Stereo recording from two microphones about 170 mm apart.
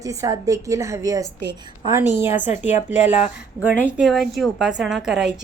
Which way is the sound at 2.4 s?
45° left (ahead or behind).